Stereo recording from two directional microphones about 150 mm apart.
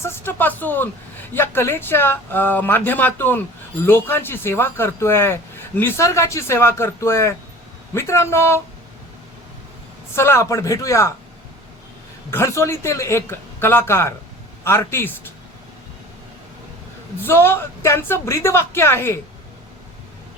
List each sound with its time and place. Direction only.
0.0 s a man's voice: 15° left (ahead or behind)
10.2 s a man's voice: 15° left (ahead or behind)
12.3 s a man's voice: 20° left (ahead or behind)
17.2 s a man's voice: 15° left (ahead or behind)